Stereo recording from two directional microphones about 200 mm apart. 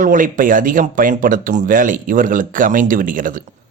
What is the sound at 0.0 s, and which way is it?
Speech, 40° right (ahead or behind).